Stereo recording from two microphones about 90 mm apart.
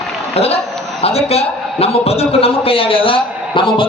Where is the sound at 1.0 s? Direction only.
90° left.